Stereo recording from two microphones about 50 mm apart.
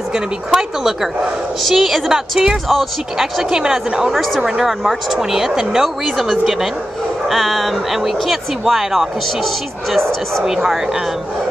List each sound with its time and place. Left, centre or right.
0.1 s speech: centre
4.1 s speech: centre
4.4 s speech: centre
4.6 s speech: centre
10.4 s speech: centre